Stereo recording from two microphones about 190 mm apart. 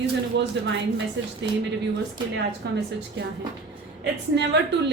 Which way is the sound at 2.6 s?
60° right (ahead or behind).